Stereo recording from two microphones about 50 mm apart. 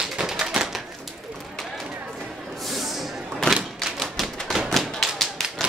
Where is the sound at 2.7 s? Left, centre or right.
Centre.